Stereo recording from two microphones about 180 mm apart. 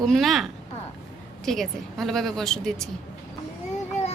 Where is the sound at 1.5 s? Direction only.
Centre (ahead or behind).